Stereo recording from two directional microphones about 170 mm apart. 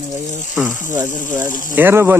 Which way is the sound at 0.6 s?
15° right (ahead or behind).